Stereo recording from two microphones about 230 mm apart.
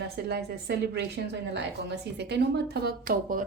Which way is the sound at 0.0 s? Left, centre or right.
Right.